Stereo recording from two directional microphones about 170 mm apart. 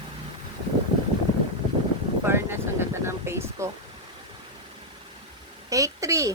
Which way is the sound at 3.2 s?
15° right (ahead or behind).